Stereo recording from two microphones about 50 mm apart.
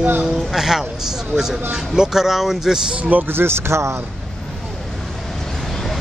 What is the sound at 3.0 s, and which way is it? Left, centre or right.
Speech, right.